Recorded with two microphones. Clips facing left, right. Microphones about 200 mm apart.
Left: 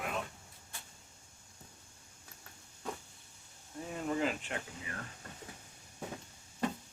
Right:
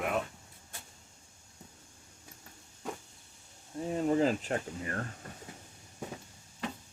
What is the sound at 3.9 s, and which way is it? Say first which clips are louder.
Speech: right 7 dB; 30° right (ahead or behind).